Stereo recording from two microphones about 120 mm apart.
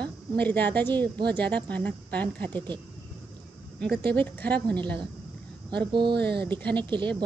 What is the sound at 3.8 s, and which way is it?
A woman's voice, 5° left (ahead or behind).